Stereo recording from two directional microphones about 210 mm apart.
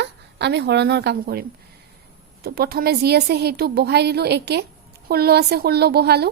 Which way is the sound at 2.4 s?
45° right (ahead or behind).